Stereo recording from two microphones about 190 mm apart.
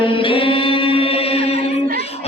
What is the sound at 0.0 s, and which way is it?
Music, 25° left (ahead or behind).